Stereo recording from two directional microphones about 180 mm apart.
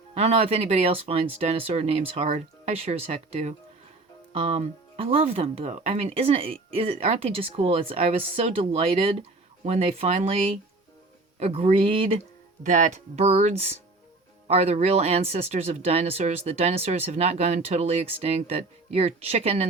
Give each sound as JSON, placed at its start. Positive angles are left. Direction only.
{"t": 0.1, "sound": "speech", "side_deg": -35}